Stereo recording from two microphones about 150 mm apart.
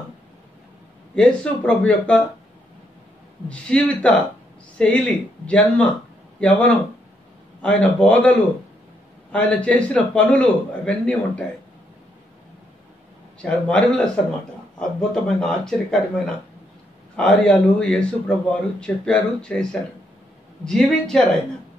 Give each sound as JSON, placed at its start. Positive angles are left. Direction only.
{"t": 1.1, "sound": "a man's voice", "side_deg": 5}
{"t": 3.4, "sound": "a man's voice", "side_deg": 10}
{"t": 13.4, "sound": "a man's voice", "side_deg": 5}
{"t": 17.2, "sound": "speech", "side_deg": 5}